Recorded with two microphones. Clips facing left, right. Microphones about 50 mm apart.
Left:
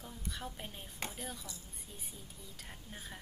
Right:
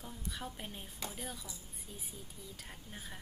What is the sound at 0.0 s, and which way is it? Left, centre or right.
A woman's voice, centre.